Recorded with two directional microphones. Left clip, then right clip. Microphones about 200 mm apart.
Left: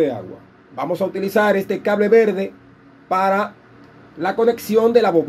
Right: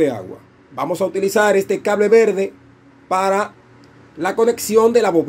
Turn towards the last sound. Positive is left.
turn(degrees=-20)  # may be behind; listen again after turning